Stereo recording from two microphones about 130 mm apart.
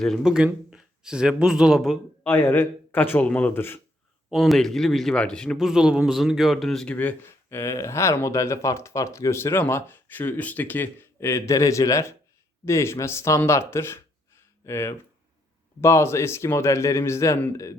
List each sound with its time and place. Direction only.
0.0 s speech: centre (ahead or behind)
2.2 s speech: 15° left (ahead or behind)
4.3 s speech: centre (ahead or behind); by 17.7 s 25° left (ahead or behind)